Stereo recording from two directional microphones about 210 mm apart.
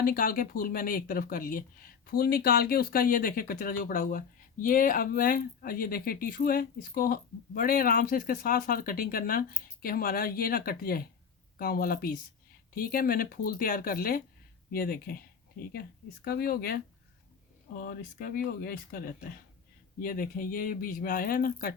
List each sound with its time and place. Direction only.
0.0 s speech: 40° left (ahead or behind)